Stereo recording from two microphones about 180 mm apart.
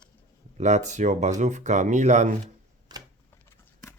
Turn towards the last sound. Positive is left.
turn(degrees=15)  # may be behind; listen again after turning